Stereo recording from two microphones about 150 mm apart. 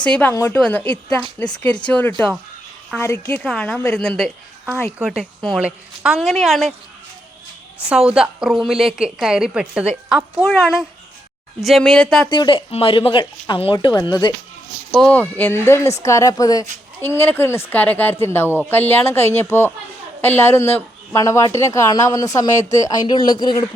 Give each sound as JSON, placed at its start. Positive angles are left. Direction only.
{"t": 0.0, "sound": "a woman's voice", "side_deg": 10}
{"t": 3.4, "sound": "a woman's voice", "side_deg": 5}
{"t": 7.9, "sound": "a woman's voice", "side_deg": -5}
{"t": 12.3, "sound": "speech", "side_deg": 30}
{"t": 14.9, "sound": "a woman's voice", "side_deg": 10}